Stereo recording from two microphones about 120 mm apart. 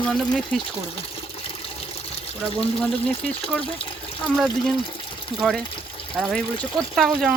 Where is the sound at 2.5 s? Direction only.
5° left (ahead or behind).